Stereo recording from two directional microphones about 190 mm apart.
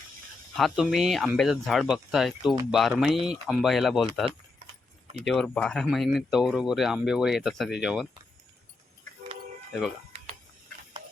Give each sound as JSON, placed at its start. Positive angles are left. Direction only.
{"t": 0.5, "sound": "speech", "side_deg": 0}
{"t": 4.6, "sound": "keys jangling", "side_deg": -35}
{"t": 5.2, "sound": "speech", "side_deg": 0}
{"t": 10.1, "sound": "a sound", "side_deg": -30}